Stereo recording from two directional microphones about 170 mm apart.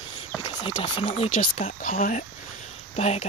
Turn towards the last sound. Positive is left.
turn(degrees=40)  # may be behind; listen again after turning